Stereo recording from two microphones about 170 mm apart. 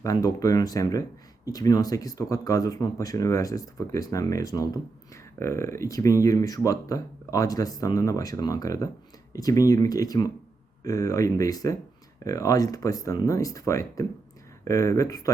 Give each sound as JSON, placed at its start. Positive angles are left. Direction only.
{"t": 0.0, "sound": "speech", "side_deg": 20}